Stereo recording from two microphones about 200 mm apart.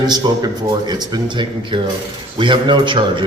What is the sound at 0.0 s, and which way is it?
A man's voice, 20° right (ahead or behind).